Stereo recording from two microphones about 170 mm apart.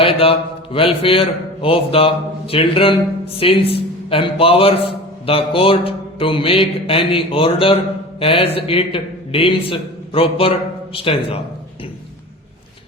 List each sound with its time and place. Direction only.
0.0 s a man's voice: 35° left (ahead or behind)